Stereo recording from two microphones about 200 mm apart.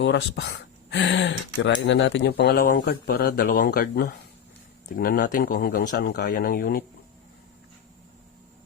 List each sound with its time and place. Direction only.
0.0 s speech: 60° left (ahead or behind)